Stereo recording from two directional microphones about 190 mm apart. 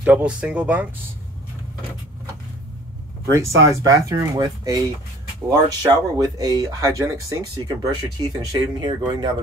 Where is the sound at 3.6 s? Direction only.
15° right (ahead or behind).